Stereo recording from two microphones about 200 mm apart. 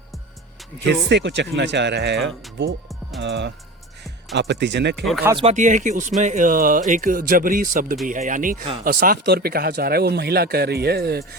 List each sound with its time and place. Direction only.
1.0 s speech: 60° right (ahead or behind)
5.0 s speech: centre (ahead or behind)
5.3 s speech: 25° right (ahead or behind)
5.5 s speech: 40° right (ahead or behind)